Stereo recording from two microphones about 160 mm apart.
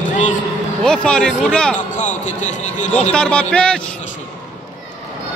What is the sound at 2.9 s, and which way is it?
Speech, 5° left (ahead or behind).